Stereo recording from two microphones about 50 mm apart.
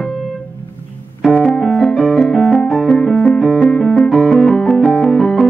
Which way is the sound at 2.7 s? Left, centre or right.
Centre.